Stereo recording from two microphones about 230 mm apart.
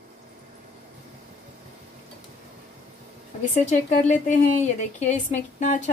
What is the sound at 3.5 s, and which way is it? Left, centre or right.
A woman's voice, left.